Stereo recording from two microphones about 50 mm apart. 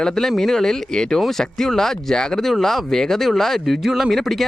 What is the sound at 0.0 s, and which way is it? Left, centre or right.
Speech, centre.